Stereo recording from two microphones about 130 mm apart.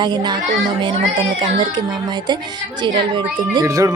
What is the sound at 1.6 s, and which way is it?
Speech, 35° right (ahead or behind).